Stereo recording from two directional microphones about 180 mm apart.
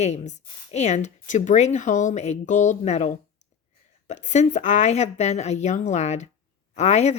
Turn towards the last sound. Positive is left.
turn(degrees=40)  # may be behind; listen again after turning